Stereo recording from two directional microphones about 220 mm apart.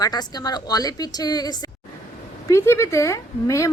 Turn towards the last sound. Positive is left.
turn(degrees=15)  # may be behind; listen again after turning